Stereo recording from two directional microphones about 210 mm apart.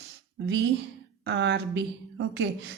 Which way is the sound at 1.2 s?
55° right (ahead or behind).